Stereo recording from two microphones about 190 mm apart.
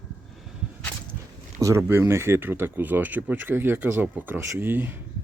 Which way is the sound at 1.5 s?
15° right (ahead or behind).